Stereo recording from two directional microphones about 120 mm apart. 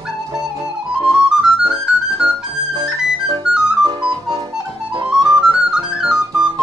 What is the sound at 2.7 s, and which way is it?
Music, 35° right (ahead or behind).